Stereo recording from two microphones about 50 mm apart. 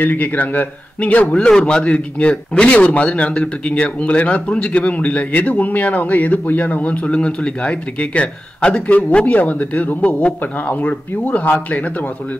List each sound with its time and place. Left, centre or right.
0.0 s speech: left
1.2 s a man's voice: centre; by 7.0 s left
7.1 s a man's voice: left